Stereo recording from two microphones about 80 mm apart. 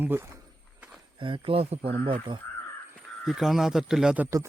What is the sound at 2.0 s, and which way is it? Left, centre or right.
Speech, right.